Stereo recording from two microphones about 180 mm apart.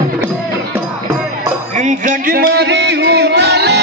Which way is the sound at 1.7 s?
45° right (ahead or behind).